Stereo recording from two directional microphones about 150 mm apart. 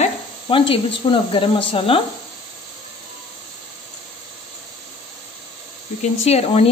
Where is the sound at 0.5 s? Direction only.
35° left (ahead or behind).